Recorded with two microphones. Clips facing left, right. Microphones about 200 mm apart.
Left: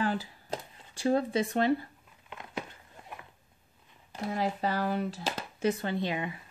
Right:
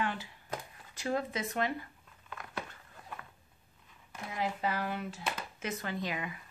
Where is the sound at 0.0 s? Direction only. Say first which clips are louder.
Left 5 dB; 35° left (ahead or behind).